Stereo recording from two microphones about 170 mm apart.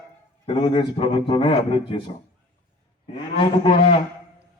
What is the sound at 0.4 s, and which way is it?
A man's voice, 30° left (ahead or behind).